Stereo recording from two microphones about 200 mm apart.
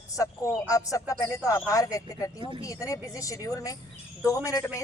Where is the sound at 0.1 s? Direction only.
15° left (ahead or behind).